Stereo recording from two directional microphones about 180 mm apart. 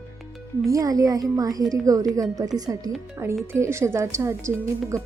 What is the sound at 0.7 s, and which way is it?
A woman's voice, 20° right (ahead or behind).